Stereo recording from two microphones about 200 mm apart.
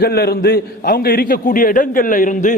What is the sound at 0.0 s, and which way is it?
A man's voice, 50° left (ahead or behind).